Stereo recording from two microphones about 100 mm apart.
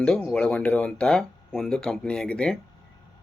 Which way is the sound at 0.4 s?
15° left (ahead or behind).